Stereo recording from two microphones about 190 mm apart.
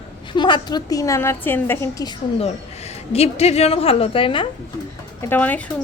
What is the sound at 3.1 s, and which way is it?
A woman's voice, 35° left (ahead or behind).